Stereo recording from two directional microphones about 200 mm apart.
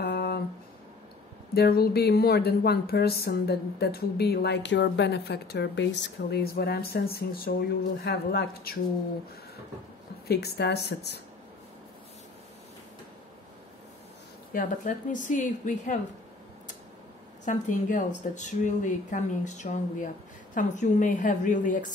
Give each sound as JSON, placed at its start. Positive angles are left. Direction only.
{"t": 0.0, "sound": "a sound", "side_deg": 55}
{"t": 1.5, "sound": "speech", "side_deg": 50}
{"t": 10.2, "sound": "speech", "side_deg": 55}
{"t": 14.5, "sound": "speech", "side_deg": 40}
{"t": 17.5, "sound": "speech", "side_deg": 40}